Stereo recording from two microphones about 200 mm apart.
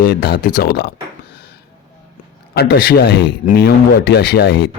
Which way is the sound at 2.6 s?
50° left (ahead or behind).